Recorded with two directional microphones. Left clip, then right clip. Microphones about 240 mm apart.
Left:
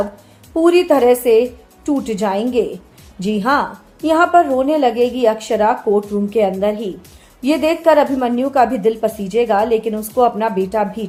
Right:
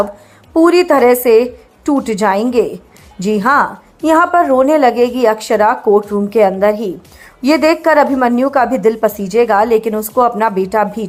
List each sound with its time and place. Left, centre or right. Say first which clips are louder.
0.5 s a woman's voice: right 3 dB; centre